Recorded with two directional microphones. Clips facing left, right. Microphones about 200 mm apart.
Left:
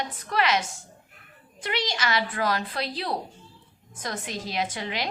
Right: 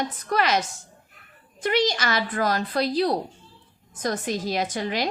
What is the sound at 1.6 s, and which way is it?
A woman's voice, 45° right (ahead or behind).